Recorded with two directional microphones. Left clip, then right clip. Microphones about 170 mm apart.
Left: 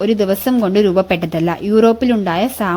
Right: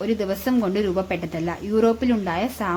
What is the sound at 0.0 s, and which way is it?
A woman's voice, 40° left (ahead or behind).